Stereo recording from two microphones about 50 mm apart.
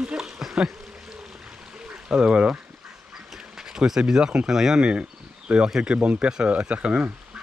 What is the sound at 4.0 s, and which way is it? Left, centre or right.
Speech, centre.